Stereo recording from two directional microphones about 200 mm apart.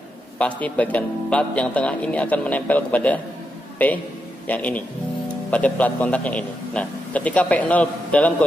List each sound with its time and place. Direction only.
0.4 s a man's voice: 5° left (ahead or behind)